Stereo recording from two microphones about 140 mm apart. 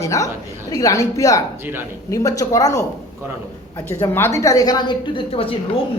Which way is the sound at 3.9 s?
20° left (ahead or behind).